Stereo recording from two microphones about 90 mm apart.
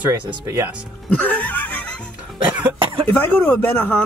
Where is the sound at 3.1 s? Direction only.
15° left (ahead or behind).